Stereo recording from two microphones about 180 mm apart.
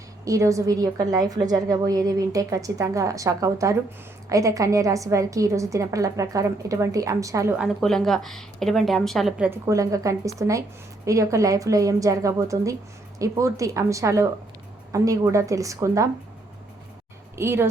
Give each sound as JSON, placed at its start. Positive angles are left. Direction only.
{"t": 0.3, "sound": "a woman's voice", "side_deg": -20}
{"t": 7.6, "sound": "a woman's voice", "side_deg": 0}
{"t": 9.5, "sound": "a woman's voice", "side_deg": -15}
{"t": 17.3, "sound": "a woman's voice", "side_deg": -15}